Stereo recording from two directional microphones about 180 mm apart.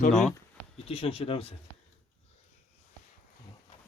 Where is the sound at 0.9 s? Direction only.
30° left (ahead or behind).